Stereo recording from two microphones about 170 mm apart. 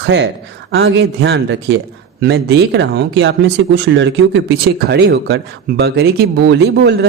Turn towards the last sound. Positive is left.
turn(degrees=-75)  # may be behind; listen again after turning